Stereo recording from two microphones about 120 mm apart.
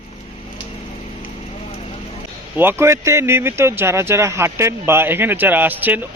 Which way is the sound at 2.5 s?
15° right (ahead or behind).